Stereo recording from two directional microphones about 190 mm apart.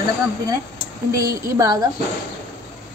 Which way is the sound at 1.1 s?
15° right (ahead or behind).